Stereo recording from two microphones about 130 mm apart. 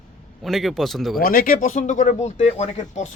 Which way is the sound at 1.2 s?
90° left.